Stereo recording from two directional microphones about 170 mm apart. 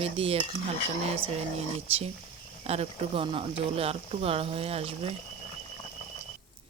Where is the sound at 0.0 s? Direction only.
35° right (ahead or behind).